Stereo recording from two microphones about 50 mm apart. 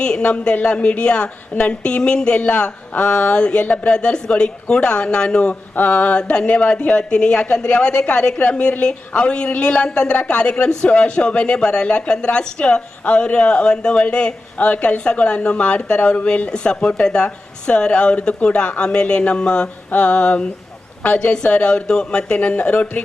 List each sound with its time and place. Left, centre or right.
0.2 s a woman's voice: left
5.7 s a woman's voice: left